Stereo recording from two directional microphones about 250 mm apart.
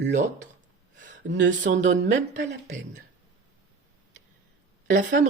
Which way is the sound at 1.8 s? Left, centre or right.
Right.